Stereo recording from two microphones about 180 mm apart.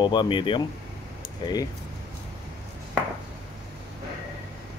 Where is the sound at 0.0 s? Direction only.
25° left (ahead or behind).